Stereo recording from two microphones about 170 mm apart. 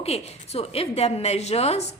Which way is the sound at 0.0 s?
35° left (ahead or behind).